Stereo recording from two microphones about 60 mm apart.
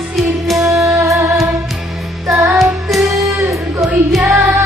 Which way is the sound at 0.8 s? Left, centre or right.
Right.